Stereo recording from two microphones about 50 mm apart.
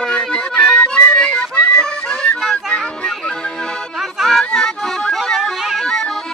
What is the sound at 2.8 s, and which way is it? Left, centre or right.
Music, centre.